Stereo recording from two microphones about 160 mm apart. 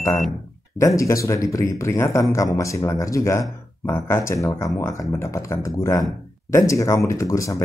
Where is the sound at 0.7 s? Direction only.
20° left (ahead or behind).